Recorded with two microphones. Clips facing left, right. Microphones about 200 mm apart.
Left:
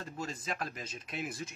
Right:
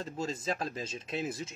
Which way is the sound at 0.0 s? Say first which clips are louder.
Right 5 dB; 25° right (ahead or behind).